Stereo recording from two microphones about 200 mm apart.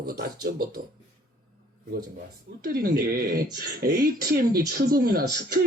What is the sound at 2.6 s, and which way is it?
Speech, 50° right (ahead or behind).